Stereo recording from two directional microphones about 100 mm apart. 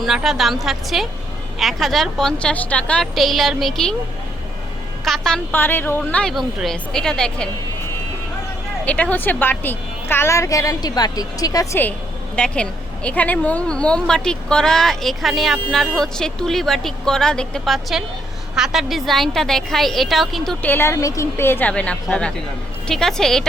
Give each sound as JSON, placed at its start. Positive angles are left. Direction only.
{"t": 0.0, "sound": "speech", "side_deg": -5}
{"t": 3.2, "sound": "speech", "side_deg": 0}
{"t": 5.0, "sound": "speech", "side_deg": 5}
{"t": 5.5, "sound": "a woman's voice", "side_deg": 20}
{"t": 6.3, "sound": "speech", "side_deg": 0}
{"t": 8.8, "sound": "a woman's voice", "side_deg": 15}
{"t": 12.4, "sound": "speech", "side_deg": 10}
{"t": 20.6, "sound": "a woman's voice", "side_deg": 20}